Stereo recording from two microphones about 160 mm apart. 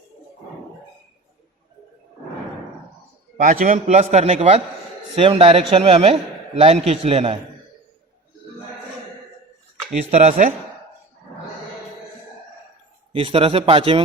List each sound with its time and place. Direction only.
3.3 s a man's voice: 60° right (ahead or behind); by 7.3 s 40° right (ahead or behind)
10.1 s a man's voice: 50° right (ahead or behind)
13.1 s a man's voice: 35° right (ahead or behind)